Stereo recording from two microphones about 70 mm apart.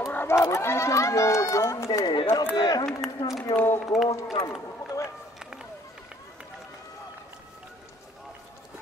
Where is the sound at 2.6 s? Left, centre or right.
Left.